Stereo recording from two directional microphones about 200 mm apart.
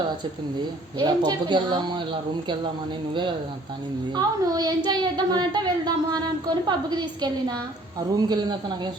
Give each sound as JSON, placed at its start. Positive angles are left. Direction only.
{"t": 0.9, "sound": "a woman's voice", "side_deg": -25}
{"t": 4.1, "sound": "a woman's voice", "side_deg": -20}